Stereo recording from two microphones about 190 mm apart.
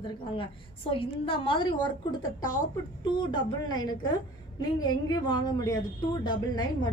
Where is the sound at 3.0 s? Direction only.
25° left (ahead or behind).